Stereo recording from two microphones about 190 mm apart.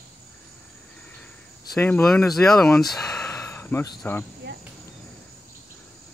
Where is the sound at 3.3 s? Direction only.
15° left (ahead or behind).